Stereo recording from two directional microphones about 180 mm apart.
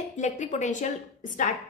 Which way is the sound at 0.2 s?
40° left (ahead or behind).